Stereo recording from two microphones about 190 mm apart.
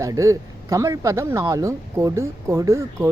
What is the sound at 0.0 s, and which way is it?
Speech, 15° right (ahead or behind).